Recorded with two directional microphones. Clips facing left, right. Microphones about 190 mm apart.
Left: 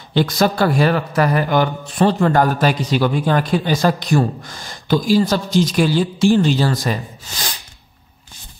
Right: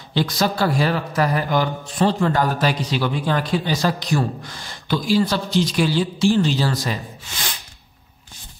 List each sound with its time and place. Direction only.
0.1 s a man's voice: 55° left (ahead or behind); by 7.5 s 40° left (ahead or behind)